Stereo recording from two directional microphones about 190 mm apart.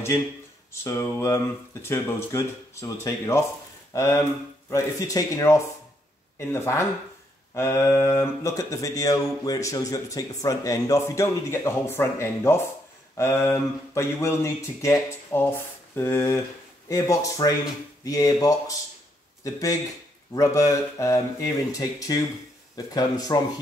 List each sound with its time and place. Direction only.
0.8 s speech: 15° left (ahead or behind)